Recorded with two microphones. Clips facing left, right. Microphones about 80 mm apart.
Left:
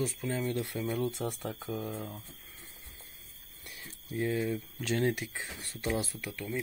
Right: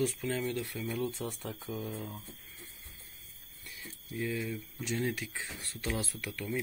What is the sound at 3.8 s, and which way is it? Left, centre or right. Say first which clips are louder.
Speech: left 3 dB; left.